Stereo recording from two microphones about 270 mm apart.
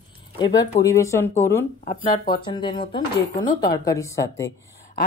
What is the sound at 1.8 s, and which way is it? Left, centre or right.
Speech, left.